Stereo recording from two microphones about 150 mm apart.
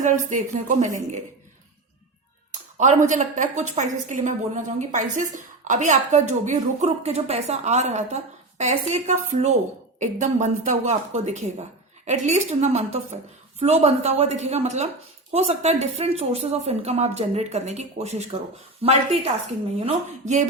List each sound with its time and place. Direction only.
0.0 s a woman's voice: 55° right (ahead or behind)
2.7 s a woman's voice: 55° right (ahead or behind)